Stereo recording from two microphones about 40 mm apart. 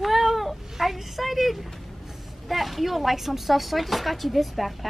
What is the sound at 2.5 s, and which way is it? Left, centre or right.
Speech, centre.